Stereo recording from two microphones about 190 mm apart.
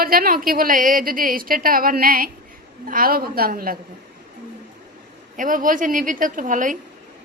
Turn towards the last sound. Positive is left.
turn(degrees=-45)  # may be behind; listen again after turning